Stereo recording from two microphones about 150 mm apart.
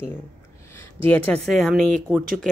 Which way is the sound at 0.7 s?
15° left (ahead or behind).